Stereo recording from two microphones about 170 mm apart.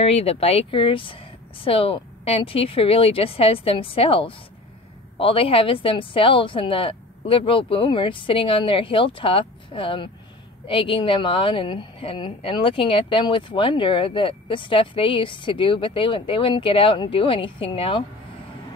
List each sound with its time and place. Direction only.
0.0 s a woman's voice: 35° left (ahead or behind)